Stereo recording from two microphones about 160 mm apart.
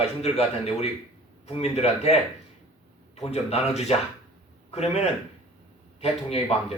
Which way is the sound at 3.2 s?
40° left (ahead or behind).